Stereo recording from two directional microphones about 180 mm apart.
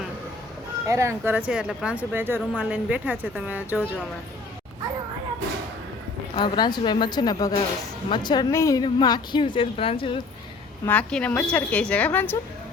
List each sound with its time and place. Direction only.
0.9 s speech: 15° right (ahead or behind)
6.3 s a woman's voice: 25° left (ahead or behind)
10.8 s a woman's voice: 5° left (ahead or behind)